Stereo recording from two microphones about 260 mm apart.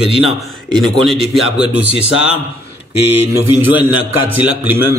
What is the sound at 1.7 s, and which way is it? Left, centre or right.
Speech, centre.